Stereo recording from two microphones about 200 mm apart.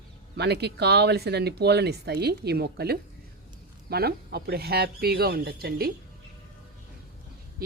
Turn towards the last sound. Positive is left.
turn(degrees=-50)  # may be behind; listen again after turning